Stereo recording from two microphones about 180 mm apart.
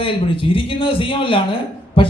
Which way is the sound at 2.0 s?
30° left (ahead or behind).